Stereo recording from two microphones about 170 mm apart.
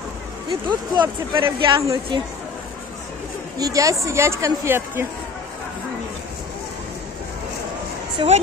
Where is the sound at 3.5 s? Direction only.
20° right (ahead or behind).